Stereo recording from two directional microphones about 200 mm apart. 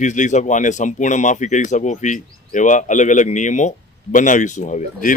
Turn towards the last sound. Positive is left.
turn(degrees=40)  # may be behind; listen again after turning